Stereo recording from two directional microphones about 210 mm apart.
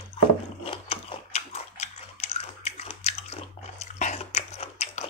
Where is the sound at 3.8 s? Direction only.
35° left (ahead or behind).